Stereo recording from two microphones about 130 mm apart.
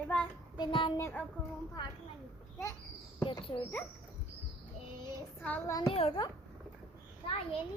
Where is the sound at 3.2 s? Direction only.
40° left (ahead or behind).